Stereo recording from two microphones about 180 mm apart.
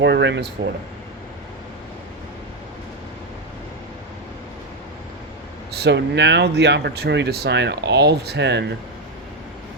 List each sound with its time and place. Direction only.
0.0 s speech: 75° right (ahead or behind)
5.7 s speech: 70° right (ahead or behind)